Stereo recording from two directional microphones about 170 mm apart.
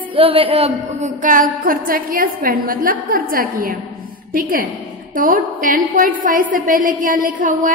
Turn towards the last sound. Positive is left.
turn(degrees=-55)  # may be behind; listen again after turning